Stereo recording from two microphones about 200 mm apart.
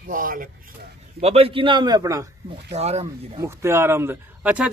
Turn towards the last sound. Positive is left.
turn(degrees=-5)  # may be behind; listen again after turning